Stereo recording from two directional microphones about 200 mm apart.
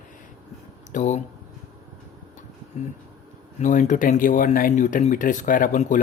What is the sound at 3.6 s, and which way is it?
Speech, 40° left (ahead or behind).